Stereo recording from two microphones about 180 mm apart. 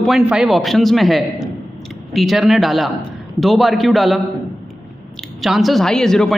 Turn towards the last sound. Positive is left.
turn(degrees=5)  # may be behind; listen again after turning